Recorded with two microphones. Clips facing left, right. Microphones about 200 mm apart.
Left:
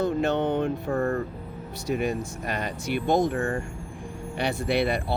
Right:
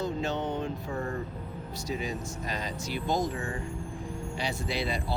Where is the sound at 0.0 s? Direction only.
60° left (ahead or behind).